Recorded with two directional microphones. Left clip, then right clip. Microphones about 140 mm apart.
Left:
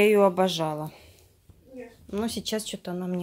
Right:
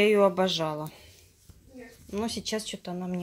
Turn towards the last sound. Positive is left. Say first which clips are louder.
# left 3 dB
turn(degrees=20)  # may be behind; listen again after turning